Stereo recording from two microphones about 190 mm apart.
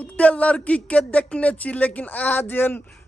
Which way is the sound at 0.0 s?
5° left (ahead or behind).